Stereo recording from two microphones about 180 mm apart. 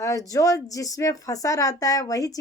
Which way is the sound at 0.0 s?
20° left (ahead or behind).